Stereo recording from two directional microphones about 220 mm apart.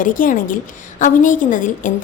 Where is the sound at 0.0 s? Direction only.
40° left (ahead or behind).